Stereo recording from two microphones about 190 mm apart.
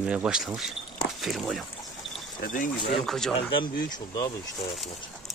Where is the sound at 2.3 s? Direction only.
45° left (ahead or behind).